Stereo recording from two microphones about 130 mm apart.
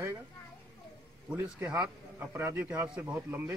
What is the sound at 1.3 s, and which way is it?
A man's voice, 25° right (ahead or behind).